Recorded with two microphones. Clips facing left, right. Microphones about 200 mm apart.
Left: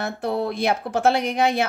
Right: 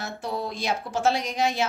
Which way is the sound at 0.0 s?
60° left (ahead or behind).